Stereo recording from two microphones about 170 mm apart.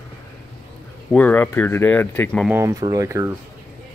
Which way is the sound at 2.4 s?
15° right (ahead or behind).